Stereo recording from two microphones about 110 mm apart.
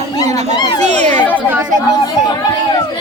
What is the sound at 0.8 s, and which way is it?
Children playing, 90° right.